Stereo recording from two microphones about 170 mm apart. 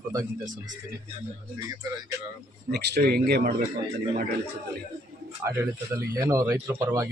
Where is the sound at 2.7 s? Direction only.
75° right (ahead or behind).